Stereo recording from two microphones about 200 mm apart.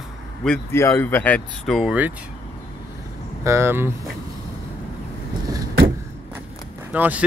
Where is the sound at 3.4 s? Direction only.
15° right (ahead or behind).